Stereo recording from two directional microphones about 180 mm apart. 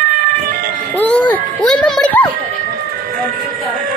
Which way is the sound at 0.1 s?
55° right (ahead or behind).